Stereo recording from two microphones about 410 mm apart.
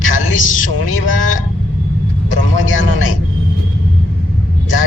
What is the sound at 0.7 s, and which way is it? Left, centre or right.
Speech, left.